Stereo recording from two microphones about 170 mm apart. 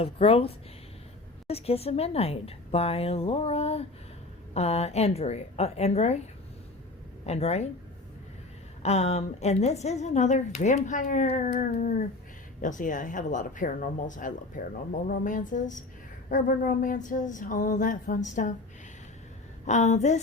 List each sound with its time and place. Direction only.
0.0 s a woman's voice: 35° left (ahead or behind)
7.3 s a woman's voice: 40° left (ahead or behind)
8.8 s a woman's voice: 40° left (ahead or behind)
19.6 s speech: 45° left (ahead or behind)